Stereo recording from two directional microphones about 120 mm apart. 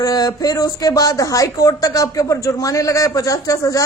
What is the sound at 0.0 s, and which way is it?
A woman's voice, 35° left (ahead or behind).